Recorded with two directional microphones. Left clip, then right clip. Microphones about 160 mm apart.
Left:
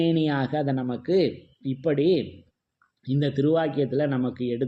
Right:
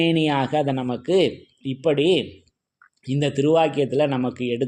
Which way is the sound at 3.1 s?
30° right (ahead or behind).